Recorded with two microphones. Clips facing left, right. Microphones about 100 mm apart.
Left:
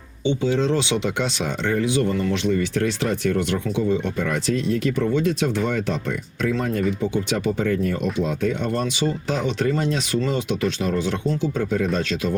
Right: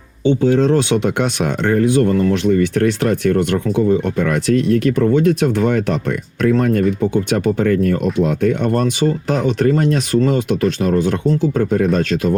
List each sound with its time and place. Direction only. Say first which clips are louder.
0.3 s speech: right 7 dB; 50° right (ahead or behind)